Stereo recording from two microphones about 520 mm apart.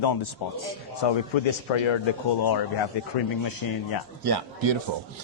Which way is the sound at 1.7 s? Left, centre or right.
Left.